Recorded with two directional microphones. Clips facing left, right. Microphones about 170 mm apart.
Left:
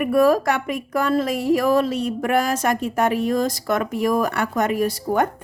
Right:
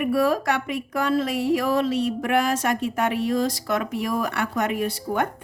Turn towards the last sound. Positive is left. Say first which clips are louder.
# left 4 dB
turn(degrees=40)  # may be behind; listen again after turning